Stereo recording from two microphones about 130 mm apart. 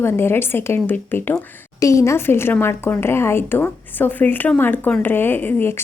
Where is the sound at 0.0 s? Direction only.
20° left (ahead or behind).